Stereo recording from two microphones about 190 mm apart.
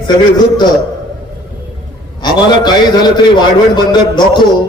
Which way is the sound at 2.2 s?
20° left (ahead or behind).